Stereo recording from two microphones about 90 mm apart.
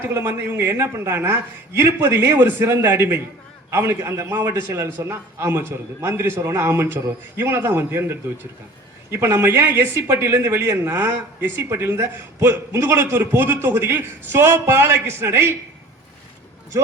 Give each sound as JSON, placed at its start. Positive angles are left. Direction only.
{"t": 0.0, "sound": "a man's voice", "side_deg": -30}